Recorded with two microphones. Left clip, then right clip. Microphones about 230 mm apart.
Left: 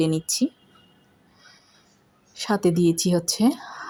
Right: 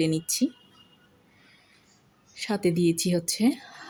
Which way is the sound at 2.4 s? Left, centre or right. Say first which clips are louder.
Left 4 dB; centre.